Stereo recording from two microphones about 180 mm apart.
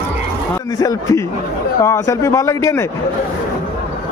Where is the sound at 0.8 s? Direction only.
20° left (ahead or behind).